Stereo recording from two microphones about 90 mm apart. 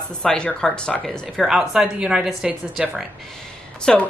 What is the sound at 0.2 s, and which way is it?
A woman's voice, 10° left (ahead or behind).